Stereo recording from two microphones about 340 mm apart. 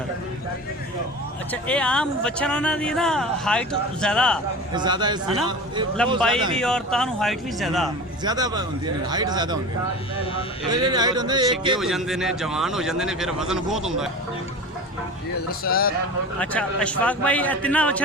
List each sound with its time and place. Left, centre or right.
1.6 s speech: centre
4.7 s speech: centre
6.1 s speech: centre
8.2 s speech: centre
10.7 s speech: centre
11.8 s speech: centre
15.4 s a man's voice: left
16.4 s speech: centre